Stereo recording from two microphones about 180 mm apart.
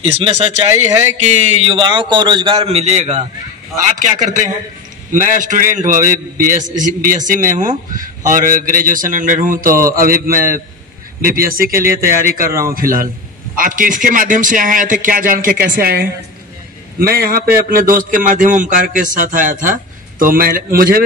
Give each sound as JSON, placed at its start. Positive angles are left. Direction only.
{"t": 0.0, "sound": "a man's voice", "side_deg": -35}